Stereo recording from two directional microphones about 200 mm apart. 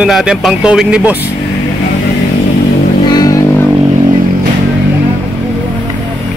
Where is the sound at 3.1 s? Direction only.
20° left (ahead or behind).